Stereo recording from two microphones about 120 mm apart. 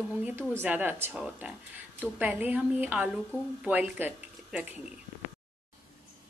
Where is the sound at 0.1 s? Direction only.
15° right (ahead or behind).